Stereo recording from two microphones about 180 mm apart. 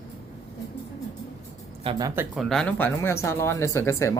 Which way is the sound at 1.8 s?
30° right (ahead or behind).